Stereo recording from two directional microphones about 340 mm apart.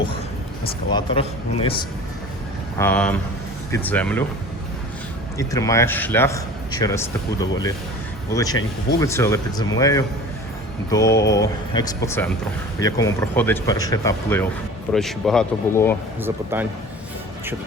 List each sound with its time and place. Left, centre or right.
0.9 s a man's voice: centre
2.7 s speech: centre
5.4 s a man's voice: centre
16.2 s speech: centre